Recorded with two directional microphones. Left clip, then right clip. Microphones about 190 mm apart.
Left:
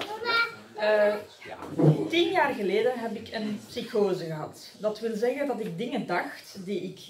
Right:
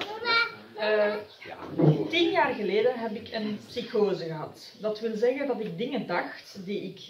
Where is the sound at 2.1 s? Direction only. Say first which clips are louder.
Even; 10° left (ahead or behind).